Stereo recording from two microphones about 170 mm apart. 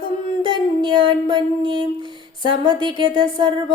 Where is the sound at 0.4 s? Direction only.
25° right (ahead or behind).